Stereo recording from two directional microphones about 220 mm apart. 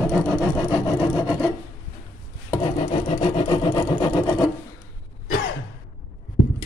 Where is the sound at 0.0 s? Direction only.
5° left (ahead or behind).